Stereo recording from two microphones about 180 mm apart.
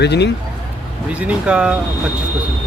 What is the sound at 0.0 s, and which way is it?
Speech, 70° left (ahead or behind).